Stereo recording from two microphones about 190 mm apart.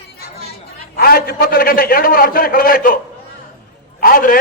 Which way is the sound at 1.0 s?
50° left (ahead or behind).